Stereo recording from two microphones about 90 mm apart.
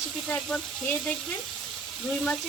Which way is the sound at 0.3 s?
15° left (ahead or behind).